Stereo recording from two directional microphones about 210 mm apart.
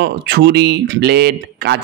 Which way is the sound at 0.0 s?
50° right (ahead or behind).